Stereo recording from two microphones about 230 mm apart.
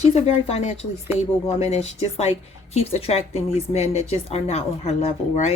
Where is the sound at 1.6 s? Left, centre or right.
Left.